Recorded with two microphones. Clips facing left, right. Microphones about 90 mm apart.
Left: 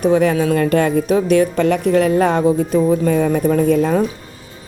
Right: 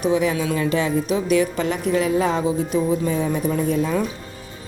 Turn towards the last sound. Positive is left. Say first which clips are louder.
# left 6 dB
turn(degrees=60)  # may be behind; listen again after turning